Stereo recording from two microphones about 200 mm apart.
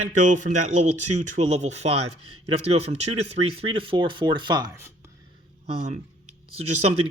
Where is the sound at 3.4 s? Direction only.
50° right (ahead or behind).